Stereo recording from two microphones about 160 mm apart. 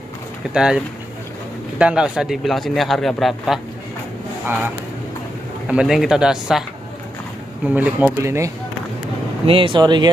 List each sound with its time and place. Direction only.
0.5 s a man's voice: 5° right (ahead or behind)
5.7 s a man's voice: 5° right (ahead or behind)
7.6 s speech: 10° right (ahead or behind)
9.5 s speech: 35° right (ahead or behind)